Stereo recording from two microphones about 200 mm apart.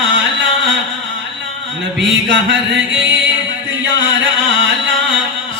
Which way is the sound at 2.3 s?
60° right (ahead or behind).